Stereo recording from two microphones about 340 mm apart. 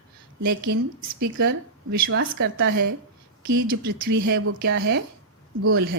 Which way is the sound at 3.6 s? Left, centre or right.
Right.